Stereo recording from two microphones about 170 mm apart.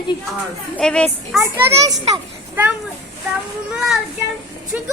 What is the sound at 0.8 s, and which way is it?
Speech, 5° left (ahead or behind).